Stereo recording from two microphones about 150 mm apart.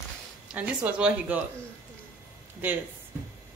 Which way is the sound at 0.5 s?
10° right (ahead or behind).